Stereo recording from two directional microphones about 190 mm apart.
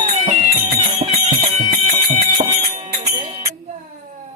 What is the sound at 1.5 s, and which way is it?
Music, 35° right (ahead or behind).